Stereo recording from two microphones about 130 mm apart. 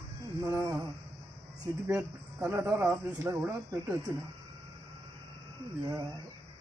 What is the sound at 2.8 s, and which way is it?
Speech, 20° right (ahead or behind).